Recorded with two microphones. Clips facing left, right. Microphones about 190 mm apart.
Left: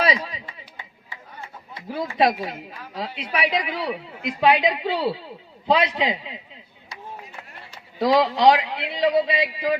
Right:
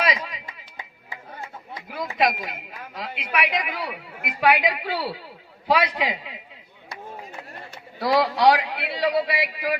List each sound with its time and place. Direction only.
0.0 s a sound: 30° left (ahead or behind)
1.9 s a woman's voice: 30° left (ahead or behind)
7.9 s a woman's voice: 20° left (ahead or behind)